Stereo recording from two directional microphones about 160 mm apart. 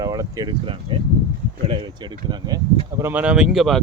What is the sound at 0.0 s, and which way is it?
Speech, 20° right (ahead or behind).